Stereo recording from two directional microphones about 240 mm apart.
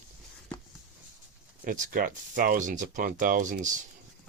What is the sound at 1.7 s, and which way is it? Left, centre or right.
Speech, right.